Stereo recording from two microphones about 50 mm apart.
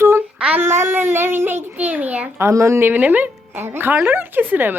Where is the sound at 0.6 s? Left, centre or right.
Right.